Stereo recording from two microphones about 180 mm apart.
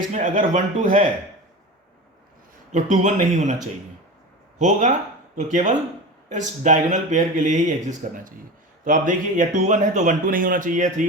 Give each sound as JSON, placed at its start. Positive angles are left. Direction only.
{"t": 0.1, "sound": "speech", "side_deg": -45}
{"t": 2.7, "sound": "speech", "side_deg": -40}
{"t": 4.5, "sound": "speech", "side_deg": -40}